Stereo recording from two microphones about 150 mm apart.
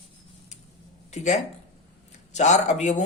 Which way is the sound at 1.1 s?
50° left (ahead or behind).